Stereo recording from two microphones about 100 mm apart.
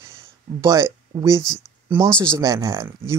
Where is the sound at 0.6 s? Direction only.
35° right (ahead or behind).